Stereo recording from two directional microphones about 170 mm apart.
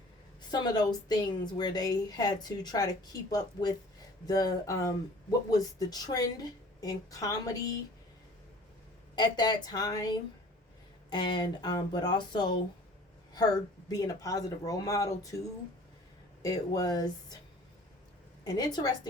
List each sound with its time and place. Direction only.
0.5 s a woman's voice: 25° left (ahead or behind)
9.1 s a woman's voice: 25° left (ahead or behind)
16.4 s a woman's voice: 20° left (ahead or behind)
18.4 s a woman's voice: 25° left (ahead or behind)